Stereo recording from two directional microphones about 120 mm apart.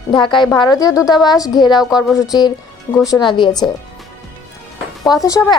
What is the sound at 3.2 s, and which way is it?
Speech, 40° left (ahead or behind).